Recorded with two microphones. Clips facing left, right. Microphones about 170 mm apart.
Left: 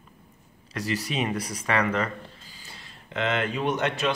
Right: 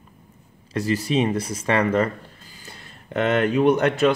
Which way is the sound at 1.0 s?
30° right (ahead or behind).